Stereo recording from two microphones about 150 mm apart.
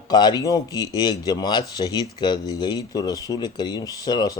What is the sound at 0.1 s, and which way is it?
Speech, 30° left (ahead or behind).